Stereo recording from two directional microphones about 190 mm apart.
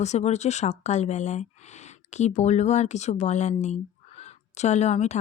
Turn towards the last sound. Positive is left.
turn(degrees=35)  # may be behind; listen again after turning